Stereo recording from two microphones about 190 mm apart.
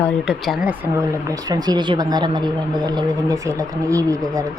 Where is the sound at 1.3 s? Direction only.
20° right (ahead or behind).